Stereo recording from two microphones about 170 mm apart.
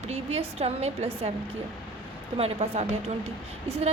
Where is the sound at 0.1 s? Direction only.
40° right (ahead or behind).